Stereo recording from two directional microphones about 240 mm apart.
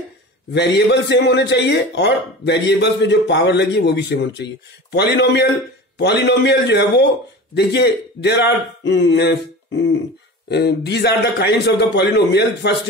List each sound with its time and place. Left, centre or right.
0.5 s a man's voice: left